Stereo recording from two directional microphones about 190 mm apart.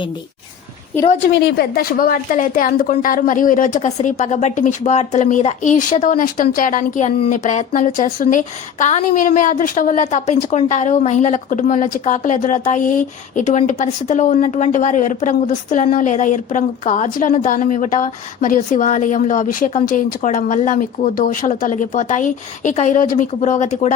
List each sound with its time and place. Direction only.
1.3 s a woman's voice: 60° left (ahead or behind); by 23.9 s 35° left (ahead or behind)